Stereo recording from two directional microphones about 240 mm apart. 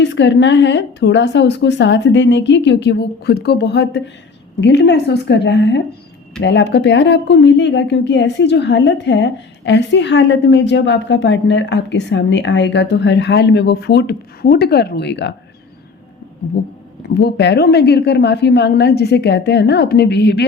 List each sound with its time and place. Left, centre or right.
0.0 s speech: left
16.6 s speech: left